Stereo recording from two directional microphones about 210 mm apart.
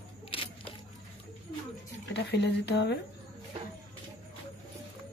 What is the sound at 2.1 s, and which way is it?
Speech, 55° left (ahead or behind).